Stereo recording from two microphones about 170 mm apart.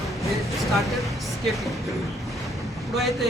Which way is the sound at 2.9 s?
Centre (ahead or behind).